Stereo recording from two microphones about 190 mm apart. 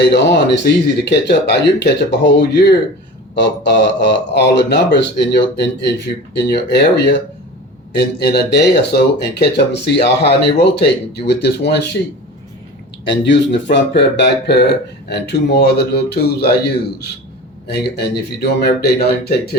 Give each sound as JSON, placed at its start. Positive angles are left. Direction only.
{"t": 0.1, "sound": "speech", "side_deg": 65}
{"t": 13.1, "sound": "speech", "side_deg": 70}
{"t": 17.7, "sound": "speech", "side_deg": 60}